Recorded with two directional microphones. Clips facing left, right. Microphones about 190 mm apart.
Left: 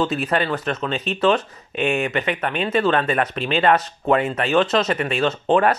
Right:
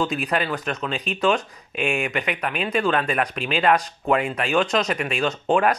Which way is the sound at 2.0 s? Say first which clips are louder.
Left 3 dB; centre (ahead or behind).